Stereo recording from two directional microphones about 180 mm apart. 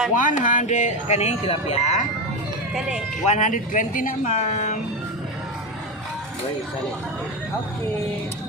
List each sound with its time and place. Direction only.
0.2 s speech: 45° left (ahead or behind)
3.2 s speech: 45° left (ahead or behind)